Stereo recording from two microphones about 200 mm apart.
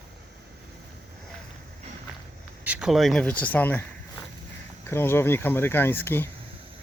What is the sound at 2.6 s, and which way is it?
Speech, 5° right (ahead or behind).